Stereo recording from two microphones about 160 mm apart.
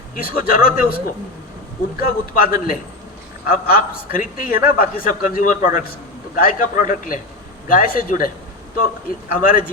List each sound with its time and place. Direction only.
0.2 s a man's voice: 65° left (ahead or behind)
9.3 s a man's voice: 60° left (ahead or behind)